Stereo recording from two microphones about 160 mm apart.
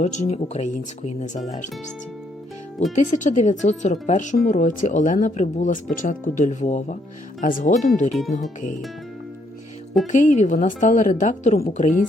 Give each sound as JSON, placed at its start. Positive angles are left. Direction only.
{"t": 0.0, "sound": "speech", "side_deg": 45}
{"t": 2.9, "sound": "speech", "side_deg": 50}
{"t": 10.1, "sound": "speech", "side_deg": 50}